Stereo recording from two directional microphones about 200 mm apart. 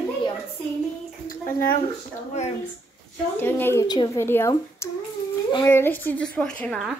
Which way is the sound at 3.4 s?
10° left (ahead or behind).